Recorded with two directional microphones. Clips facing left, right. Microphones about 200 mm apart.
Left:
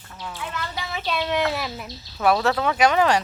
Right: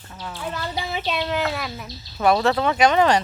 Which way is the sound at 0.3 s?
35° right (ahead or behind).